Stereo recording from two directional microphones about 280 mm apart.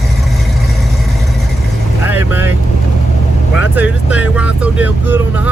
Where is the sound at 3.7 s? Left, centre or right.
Centre.